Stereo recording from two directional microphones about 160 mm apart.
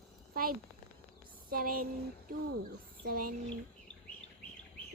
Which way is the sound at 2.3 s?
65° right (ahead or behind).